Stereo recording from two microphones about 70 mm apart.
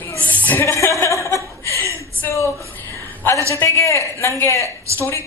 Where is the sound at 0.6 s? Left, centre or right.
Left.